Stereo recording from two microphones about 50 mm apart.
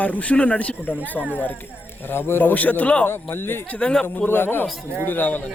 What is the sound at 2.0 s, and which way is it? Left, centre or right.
Speech, left.